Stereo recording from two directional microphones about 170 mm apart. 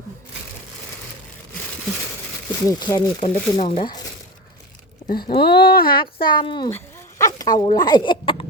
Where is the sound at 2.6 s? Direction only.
20° left (ahead or behind).